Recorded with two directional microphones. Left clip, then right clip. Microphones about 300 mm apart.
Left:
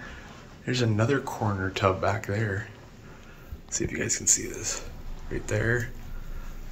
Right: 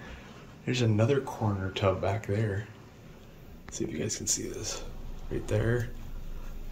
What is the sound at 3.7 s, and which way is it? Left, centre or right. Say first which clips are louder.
Speech: left 5 dB; centre.